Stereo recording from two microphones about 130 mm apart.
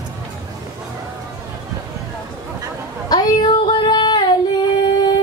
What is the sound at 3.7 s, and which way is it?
Female singing, 35° left (ahead or behind).